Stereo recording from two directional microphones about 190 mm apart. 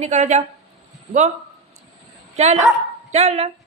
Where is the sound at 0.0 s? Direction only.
35° right (ahead or behind).